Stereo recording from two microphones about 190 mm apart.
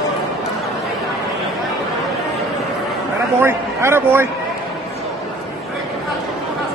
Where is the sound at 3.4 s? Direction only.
15° right (ahead or behind).